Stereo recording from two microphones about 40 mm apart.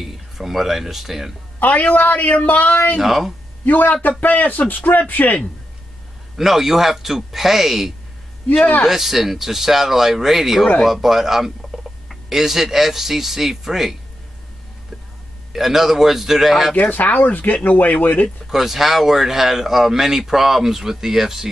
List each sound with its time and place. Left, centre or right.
0.0 s speech: centre
1.6 s a woman's voice: left
3.0 s speech: centre
3.6 s a woman's voice: left
6.3 s speech: centre
15.5 s speech: centre
16.7 s a woman's voice: left
18.5 s speech: centre